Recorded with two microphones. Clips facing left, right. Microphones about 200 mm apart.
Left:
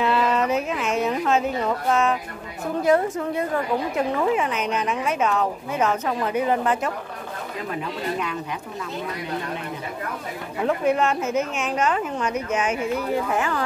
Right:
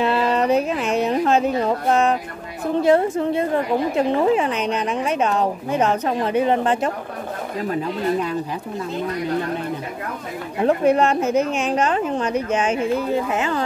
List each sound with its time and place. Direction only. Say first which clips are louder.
0.0 s a woman's voice: right 2 dB; 30° right (ahead or behind)
10.6 s a woman's voice: right 5 dB; 35° right (ahead or behind)